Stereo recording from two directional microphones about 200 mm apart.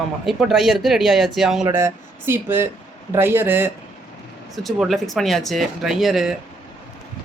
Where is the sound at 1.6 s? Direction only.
15° right (ahead or behind).